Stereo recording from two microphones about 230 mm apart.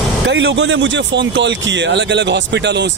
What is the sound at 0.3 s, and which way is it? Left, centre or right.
Speech, right.